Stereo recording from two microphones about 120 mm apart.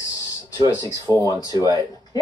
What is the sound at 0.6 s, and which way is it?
Speech, 30° left (ahead or behind).